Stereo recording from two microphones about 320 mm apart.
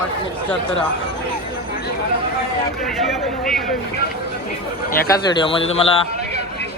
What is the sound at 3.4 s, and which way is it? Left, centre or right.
Speech, centre.